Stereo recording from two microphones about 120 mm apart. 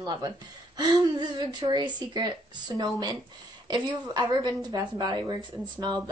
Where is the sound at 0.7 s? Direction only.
35° right (ahead or behind).